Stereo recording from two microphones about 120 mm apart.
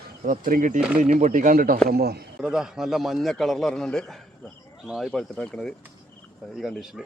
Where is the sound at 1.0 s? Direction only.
90° right.